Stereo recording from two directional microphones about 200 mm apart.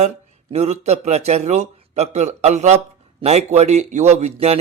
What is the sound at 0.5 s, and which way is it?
Speech, 35° right (ahead or behind).